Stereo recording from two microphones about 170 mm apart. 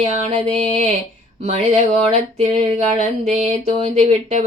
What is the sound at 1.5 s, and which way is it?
Mantra, 40° right (ahead or behind).